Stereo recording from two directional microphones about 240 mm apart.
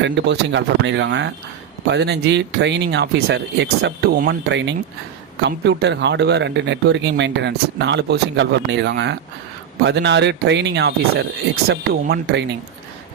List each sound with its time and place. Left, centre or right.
0.0 s speech: right